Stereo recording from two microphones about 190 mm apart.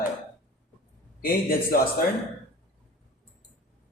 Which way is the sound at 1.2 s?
50° left (ahead or behind).